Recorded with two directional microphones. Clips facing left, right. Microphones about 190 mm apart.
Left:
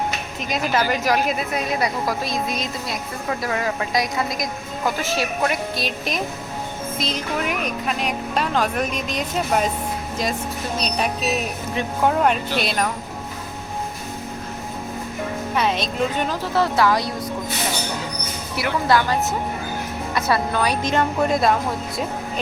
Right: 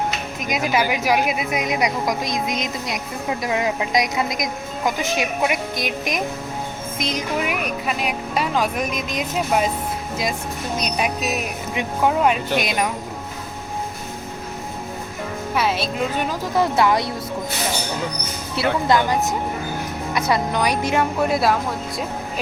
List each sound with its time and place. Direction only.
0.4 s a woman's voice: 10° right (ahead or behind)
11.3 s a woman's voice: 10° right (ahead or behind)
15.5 s a woman's voice: 5° right (ahead or behind); by 17.1 s 20° right (ahead or behind)
18.5 s a woman's voice: 25° right (ahead or behind); by 22.0 s centre (ahead or behind)